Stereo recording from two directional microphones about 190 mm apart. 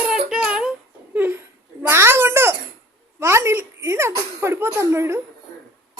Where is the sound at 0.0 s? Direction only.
5° right (ahead or behind).